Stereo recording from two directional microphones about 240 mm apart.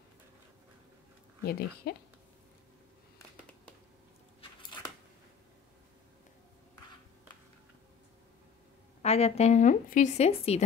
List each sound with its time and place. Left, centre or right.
1.4 s speech: left
9.0 s a woman's voice: left